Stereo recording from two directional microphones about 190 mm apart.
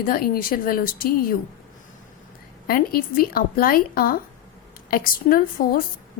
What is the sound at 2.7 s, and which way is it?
A woman's voice, 50° left (ahead or behind).